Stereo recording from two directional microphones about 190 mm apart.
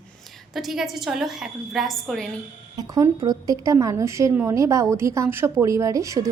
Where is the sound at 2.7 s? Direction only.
20° right (ahead or behind).